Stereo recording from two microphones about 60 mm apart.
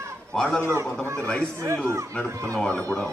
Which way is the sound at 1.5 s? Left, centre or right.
Right.